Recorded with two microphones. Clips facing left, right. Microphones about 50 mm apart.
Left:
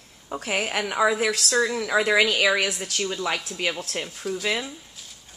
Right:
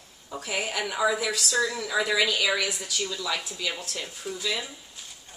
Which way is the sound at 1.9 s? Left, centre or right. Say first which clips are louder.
Left 5 dB; left.